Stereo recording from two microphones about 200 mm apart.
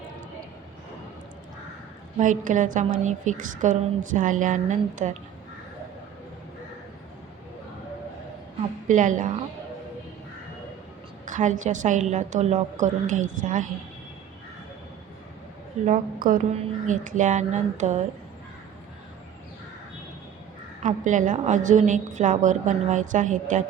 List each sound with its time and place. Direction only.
2.1 s a woman's voice: 40° right (ahead or behind)
8.9 s a woman's voice: 40° right (ahead or behind)
11.3 s a woman's voice: 40° right (ahead or behind)
15.9 s a woman's voice: 45° right (ahead or behind)
20.8 s a woman's voice: 40° right (ahead or behind)